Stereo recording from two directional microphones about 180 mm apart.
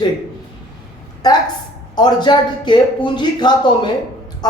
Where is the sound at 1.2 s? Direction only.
20° left (ahead or behind).